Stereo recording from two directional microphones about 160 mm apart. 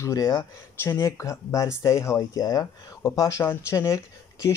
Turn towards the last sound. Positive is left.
turn(degrees=20)  # may be behind; listen again after turning